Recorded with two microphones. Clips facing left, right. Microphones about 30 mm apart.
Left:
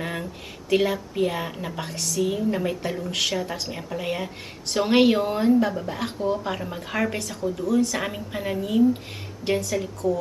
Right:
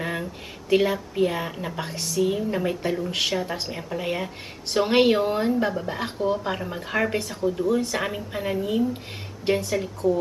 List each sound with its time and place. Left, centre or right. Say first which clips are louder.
0.0 s a woman's voice: right 1 dB; centre
2.0 s a woman's voice: right 1 dB; centre
2.2 s a woman's voice: even; centre
7.6 s a woman's voice: left 3 dB; right
7.9 s a woman's voice: right 1 dB; centre
9.6 s a woman's voice: right 1 dB; right